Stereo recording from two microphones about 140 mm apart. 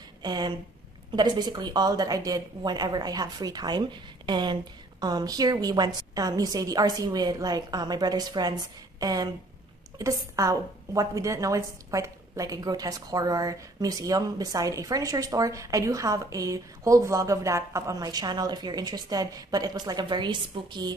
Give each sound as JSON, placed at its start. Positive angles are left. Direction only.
{"t": 0.2, "sound": "a woman's voice", "side_deg": -30}